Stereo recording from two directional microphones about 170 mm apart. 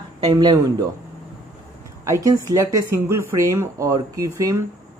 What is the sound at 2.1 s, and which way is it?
Speech, 20° right (ahead or behind).